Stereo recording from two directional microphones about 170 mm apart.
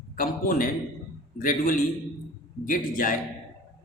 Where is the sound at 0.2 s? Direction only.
55° left (ahead or behind).